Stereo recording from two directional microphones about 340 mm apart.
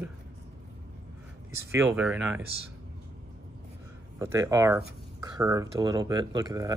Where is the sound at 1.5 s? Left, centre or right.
Centre.